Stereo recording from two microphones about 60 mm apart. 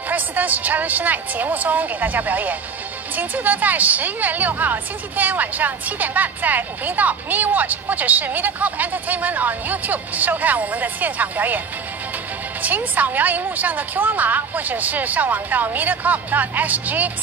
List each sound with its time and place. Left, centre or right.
0.1 s a woman's voice: right
12.6 s a woman's voice: right